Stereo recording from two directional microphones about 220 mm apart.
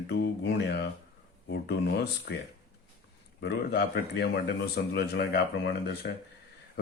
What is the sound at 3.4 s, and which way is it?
Speech, 50° left (ahead or behind).